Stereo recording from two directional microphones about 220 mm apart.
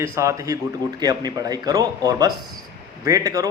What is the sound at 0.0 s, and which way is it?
A man's voice, 15° right (ahead or behind).